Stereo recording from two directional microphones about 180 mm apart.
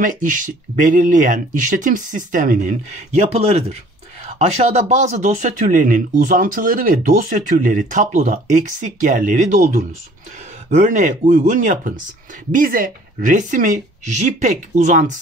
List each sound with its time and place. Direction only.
0.0 s speech: 45° right (ahead or behind)
10.7 s speech: 40° right (ahead or behind)